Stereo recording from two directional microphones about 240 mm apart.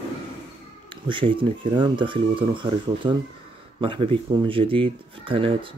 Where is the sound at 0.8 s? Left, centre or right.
Right.